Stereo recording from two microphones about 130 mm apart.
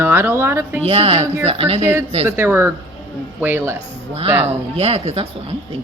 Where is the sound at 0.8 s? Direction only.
50° right (ahead or behind).